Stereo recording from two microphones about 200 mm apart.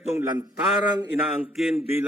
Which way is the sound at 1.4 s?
Centre (ahead or behind).